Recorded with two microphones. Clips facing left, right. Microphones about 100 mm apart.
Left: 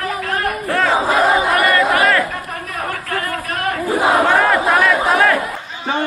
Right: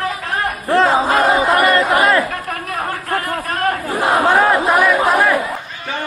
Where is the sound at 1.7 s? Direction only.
20° right (ahead or behind).